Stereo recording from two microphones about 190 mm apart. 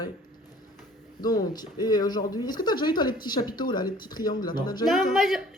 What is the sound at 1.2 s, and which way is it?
Speech, 20° left (ahead or behind).